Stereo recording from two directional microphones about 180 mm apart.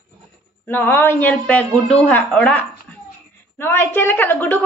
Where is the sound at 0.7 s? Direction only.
10° left (ahead or behind).